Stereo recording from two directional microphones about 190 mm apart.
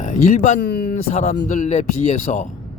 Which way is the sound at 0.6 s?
55° left (ahead or behind).